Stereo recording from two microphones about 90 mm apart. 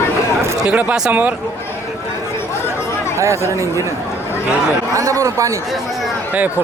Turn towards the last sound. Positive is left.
turn(degrees=-35)  # may be behind; listen again after turning